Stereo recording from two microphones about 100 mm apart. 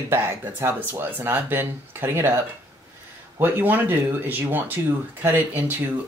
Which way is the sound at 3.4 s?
20° right (ahead or behind).